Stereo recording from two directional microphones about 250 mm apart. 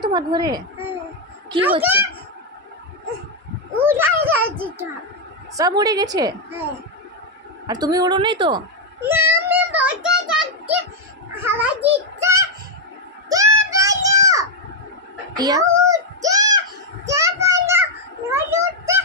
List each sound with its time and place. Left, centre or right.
0.0 s a woman's voice: centre
1.8 s a woman's voice: centre
3.8 s a child's voice: centre
7.6 s a woman's voice: centre
9.1 s a sound: centre
11.4 s a child's voice: centre
13.3 s a sound: centre
15.3 s child singing: centre
18.3 s a sound: centre